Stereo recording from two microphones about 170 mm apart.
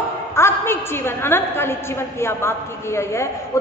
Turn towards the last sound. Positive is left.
turn(degrees=15)  # may be behind; listen again after turning